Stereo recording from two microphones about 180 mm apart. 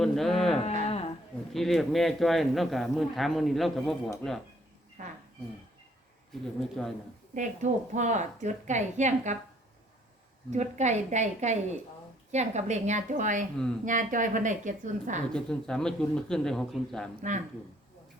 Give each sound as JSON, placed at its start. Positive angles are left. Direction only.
{"t": 0.0, "sound": "speech", "side_deg": 0}
{"t": 0.9, "sound": "a sound", "side_deg": 35}
{"t": 1.5, "sound": "speech", "side_deg": 0}
{"t": 5.0, "sound": "speech", "side_deg": -45}
{"t": 6.4, "sound": "speech", "side_deg": 0}
{"t": 7.3, "sound": "a woman's voice", "side_deg": -40}
{"t": 10.5, "sound": "a woman's voice", "side_deg": -40}
{"t": 15.3, "sound": "speech", "side_deg": 5}